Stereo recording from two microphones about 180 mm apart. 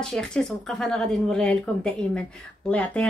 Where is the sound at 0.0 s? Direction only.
5° left (ahead or behind).